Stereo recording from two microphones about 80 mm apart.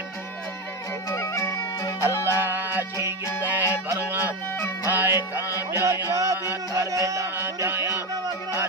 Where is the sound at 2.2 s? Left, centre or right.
Right.